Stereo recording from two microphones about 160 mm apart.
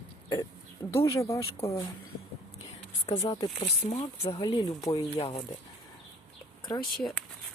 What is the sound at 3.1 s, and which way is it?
Speech, 35° left (ahead or behind).